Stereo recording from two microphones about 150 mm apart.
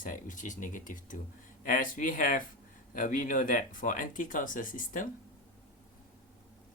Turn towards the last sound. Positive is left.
turn(degrees=65)  # may be behind; listen again after turning